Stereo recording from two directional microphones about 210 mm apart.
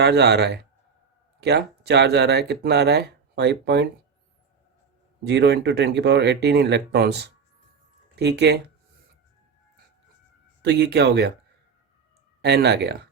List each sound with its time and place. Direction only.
0.0 s speech: 50° right (ahead or behind)
5.2 s speech: 55° right (ahead or behind)
10.6 s speech: 50° right (ahead or behind)
12.4 s speech: 50° right (ahead or behind)